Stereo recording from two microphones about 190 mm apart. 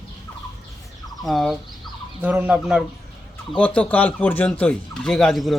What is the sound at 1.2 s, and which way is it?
Fowl, centre (ahead or behind).